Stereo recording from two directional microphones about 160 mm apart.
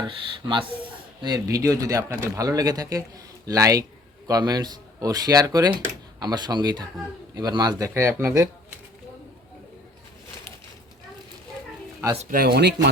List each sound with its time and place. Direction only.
0.1 s speech: 30° right (ahead or behind)
12.2 s speech: 65° right (ahead or behind); by 12.9 s 90° right